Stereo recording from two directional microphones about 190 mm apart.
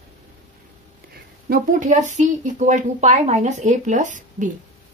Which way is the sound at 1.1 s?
45° right (ahead or behind).